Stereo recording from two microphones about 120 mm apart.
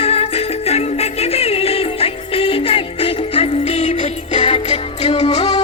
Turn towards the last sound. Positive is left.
turn(degrees=35)  # may be behind; listen again after turning